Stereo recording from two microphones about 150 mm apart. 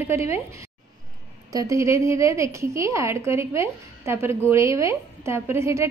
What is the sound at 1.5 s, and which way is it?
A woman's voice, 20° right (ahead or behind).